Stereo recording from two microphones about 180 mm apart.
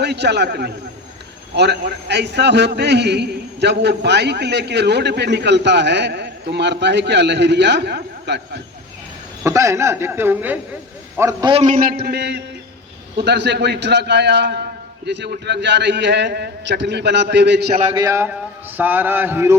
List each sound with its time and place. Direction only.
0.0 s a man's voice: 70° right (ahead or behind)
9.4 s a man's voice: 15° right (ahead or behind)
11.6 s a man's voice: 55° right (ahead or behind); by 17.7 s 70° right (ahead or behind)
17.9 s a man's voice: 15° right (ahead or behind)